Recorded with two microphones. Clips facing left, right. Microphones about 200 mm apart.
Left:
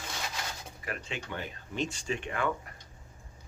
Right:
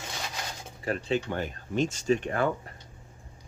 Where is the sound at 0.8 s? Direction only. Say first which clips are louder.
Right 11 dB; 35° right (ahead or behind).